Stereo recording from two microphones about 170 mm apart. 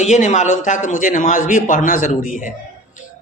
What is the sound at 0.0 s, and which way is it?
A man's voice, 45° left (ahead or behind).